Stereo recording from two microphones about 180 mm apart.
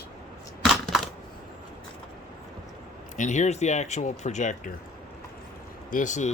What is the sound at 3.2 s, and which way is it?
Speech, 40° left (ahead or behind).